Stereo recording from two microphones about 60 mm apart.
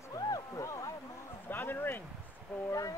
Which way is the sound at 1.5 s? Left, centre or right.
Left.